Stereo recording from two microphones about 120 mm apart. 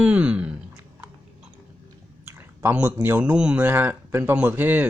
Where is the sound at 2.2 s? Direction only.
20° right (ahead or behind).